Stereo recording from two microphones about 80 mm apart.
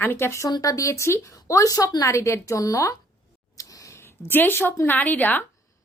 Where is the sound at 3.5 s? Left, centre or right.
Left.